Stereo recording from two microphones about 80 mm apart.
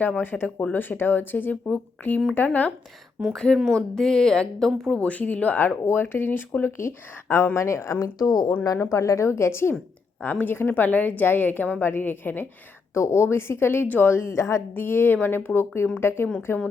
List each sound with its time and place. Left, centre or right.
0.2 s speech: left
3.3 s speech: centre; by 14.6 s left
14.8 s speech: left